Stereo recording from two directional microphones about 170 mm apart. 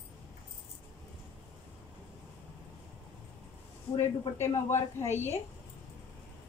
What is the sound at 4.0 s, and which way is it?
A woman's voice, 15° left (ahead or behind).